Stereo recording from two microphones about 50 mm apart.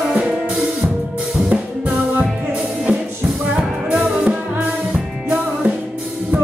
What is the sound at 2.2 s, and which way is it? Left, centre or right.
Music, right.